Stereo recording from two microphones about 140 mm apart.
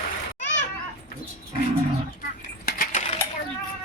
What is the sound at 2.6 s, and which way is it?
Coin, 80° left.